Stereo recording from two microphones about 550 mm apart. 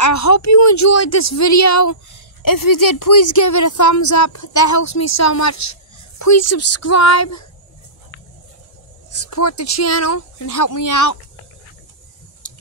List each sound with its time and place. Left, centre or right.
0.0 s a woman's voice: left
9.1 s a woman's voice: left
12.4 s tick-tock: left